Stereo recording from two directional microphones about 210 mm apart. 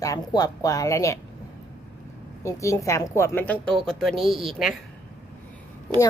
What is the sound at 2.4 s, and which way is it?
A woman's voice, 15° left (ahead or behind).